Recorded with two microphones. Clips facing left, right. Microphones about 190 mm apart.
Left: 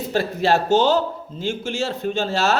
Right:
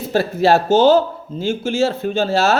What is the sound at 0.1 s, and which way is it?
Speech, 40° right (ahead or behind).